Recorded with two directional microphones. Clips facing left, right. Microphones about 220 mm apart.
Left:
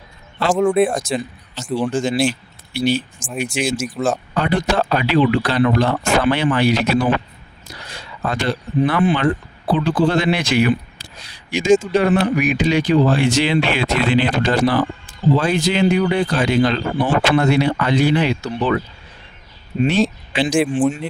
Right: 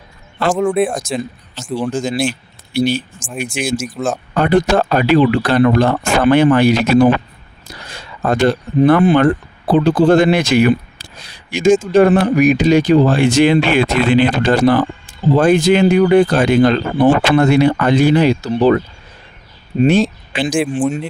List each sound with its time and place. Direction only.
0.5 s speech: centre (ahead or behind)
1.9 s speech: 40° right (ahead or behind)
3.8 s speech: centre (ahead or behind)
4.4 s speech: 50° right (ahead or behind)
20.3 s speech: 50° right (ahead or behind)